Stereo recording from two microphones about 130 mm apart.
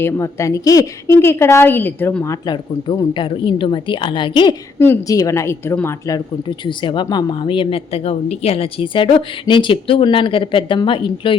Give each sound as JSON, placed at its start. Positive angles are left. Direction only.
{"t": 0.0, "sound": "a woman's voice", "side_deg": 20}
{"t": 2.5, "sound": "speech", "side_deg": 35}
{"t": 5.0, "sound": "a woman's voice", "side_deg": 25}
{"t": 6.7, "sound": "speech", "side_deg": 40}